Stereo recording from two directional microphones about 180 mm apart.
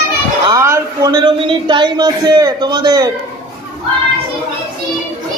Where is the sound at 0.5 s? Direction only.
20° right (ahead or behind).